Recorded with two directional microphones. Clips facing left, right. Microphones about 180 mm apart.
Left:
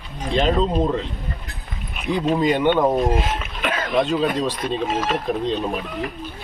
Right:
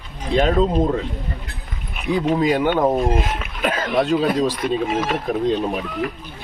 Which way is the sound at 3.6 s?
40° right (ahead or behind).